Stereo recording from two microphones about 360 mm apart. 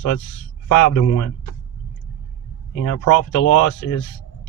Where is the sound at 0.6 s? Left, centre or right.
Left.